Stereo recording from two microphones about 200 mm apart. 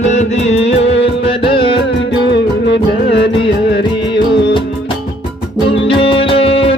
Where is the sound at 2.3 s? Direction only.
60° left (ahead or behind).